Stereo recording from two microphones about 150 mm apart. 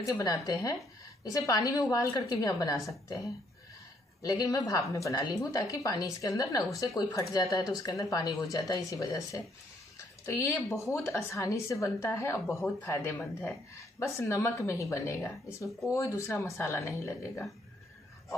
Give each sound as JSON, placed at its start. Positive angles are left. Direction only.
{"t": 0.0, "sound": "a woman's voice", "side_deg": 25}
{"t": 4.2, "sound": "a woman's voice", "side_deg": 25}